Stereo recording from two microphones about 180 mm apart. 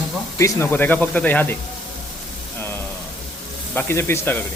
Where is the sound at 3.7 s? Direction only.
10° left (ahead or behind).